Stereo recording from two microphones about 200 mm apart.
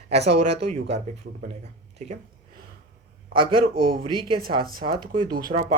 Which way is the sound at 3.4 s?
25° right (ahead or behind).